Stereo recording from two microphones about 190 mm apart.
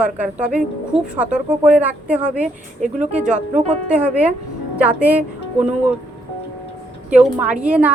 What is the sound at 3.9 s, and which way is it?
A woman's voice, 5° right (ahead or behind).